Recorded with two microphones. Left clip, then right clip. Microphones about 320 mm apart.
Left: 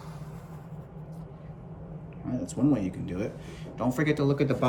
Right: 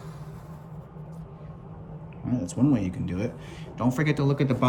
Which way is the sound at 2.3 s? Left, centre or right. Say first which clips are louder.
Right 2 dB; right.